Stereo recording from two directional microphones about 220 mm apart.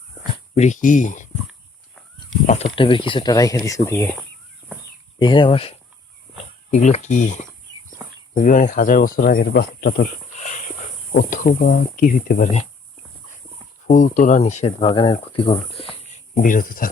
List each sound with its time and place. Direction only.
0.5 s speech: 30° left (ahead or behind)
2.5 s speech: 30° left (ahead or behind); by 4.1 s 10° left (ahead or behind)
5.2 s speech: 20° left (ahead or behind)
8.4 s speech: 35° left (ahead or behind)
10.3 s speech: 35° left (ahead or behind)
13.8 s speech: 35° left (ahead or behind)